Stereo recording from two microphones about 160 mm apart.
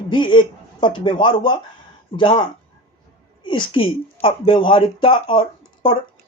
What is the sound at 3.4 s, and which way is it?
Speech, 30° left (ahead or behind).